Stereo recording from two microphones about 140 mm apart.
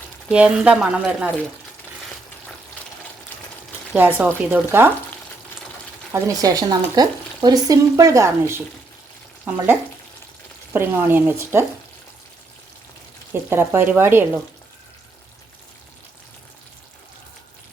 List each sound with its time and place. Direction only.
0.3 s speech: 5° right (ahead or behind)
3.9 s speech: 10° right (ahead or behind)
6.1 s speech: 20° right (ahead or behind)
9.4 s frying: 10° right (ahead or behind)
10.7 s speech: 15° right (ahead or behind)
13.3 s speech: 15° right (ahead or behind)